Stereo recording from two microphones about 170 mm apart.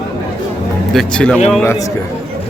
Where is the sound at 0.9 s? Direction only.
5° left (ahead or behind).